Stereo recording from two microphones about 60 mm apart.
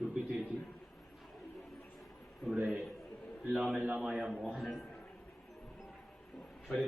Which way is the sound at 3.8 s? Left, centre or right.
Right.